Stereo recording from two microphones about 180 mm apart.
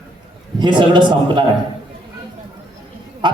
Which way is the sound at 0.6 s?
25° right (ahead or behind).